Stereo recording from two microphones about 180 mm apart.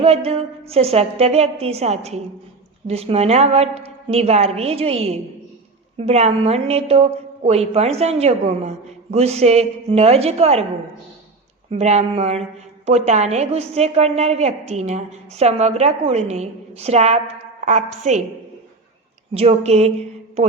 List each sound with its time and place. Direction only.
0.0 s a woman's voice: 35° right (ahead or behind)
11.7 s a woman's voice: 40° right (ahead or behind)
19.3 s a woman's voice: 35° right (ahead or behind)